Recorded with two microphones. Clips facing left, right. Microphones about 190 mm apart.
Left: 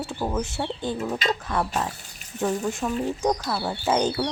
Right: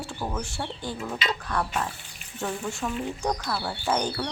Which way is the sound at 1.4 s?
20° left (ahead or behind).